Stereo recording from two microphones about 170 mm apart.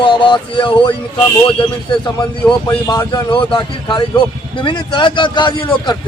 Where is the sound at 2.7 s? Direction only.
20° left (ahead or behind).